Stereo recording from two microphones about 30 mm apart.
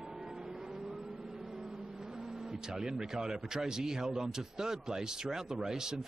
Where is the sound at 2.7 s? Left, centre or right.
Right.